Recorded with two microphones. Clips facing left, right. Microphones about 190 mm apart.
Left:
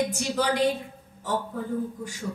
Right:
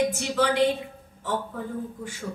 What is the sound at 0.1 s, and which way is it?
Speech, 40° left (ahead or behind).